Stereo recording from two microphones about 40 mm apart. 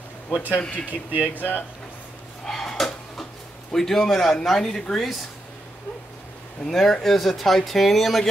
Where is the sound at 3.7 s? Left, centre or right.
Centre.